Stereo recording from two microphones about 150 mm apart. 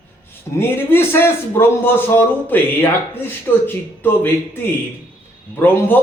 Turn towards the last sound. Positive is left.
turn(degrees=15)  # may be behind; listen again after turning